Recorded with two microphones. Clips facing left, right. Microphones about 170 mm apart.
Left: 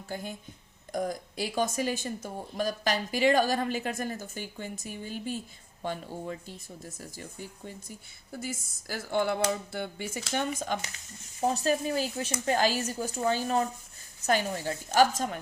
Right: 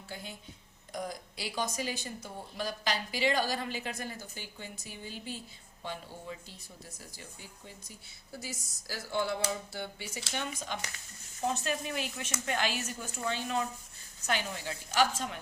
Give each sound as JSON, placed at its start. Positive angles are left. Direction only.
{"t": 0.1, "sound": "speech", "side_deg": 50}
{"t": 11.3, "sound": "speech", "side_deg": 35}